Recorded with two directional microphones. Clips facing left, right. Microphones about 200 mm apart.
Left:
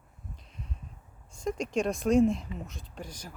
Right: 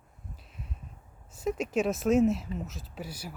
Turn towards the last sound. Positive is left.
turn(degrees=-5)  # may be behind; listen again after turning